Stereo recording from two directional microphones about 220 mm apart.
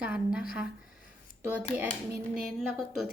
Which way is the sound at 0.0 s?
5° right (ahead or behind).